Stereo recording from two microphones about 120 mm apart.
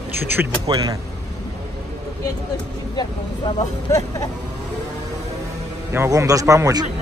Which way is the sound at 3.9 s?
25° left (ahead or behind).